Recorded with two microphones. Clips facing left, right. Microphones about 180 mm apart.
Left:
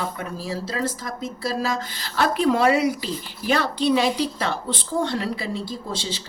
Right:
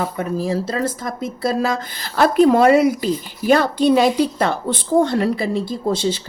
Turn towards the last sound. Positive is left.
turn(degrees=-55)  # may be behind; listen again after turning